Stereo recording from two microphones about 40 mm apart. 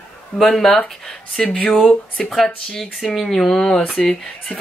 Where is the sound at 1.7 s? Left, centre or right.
Left.